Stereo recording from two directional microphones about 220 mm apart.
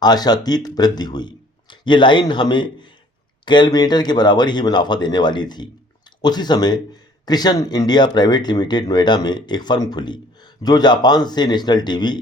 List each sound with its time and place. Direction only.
0.0 s speech: 20° left (ahead or behind)